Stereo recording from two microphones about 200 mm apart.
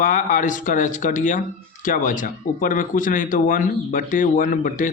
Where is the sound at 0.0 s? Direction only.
40° left (ahead or behind).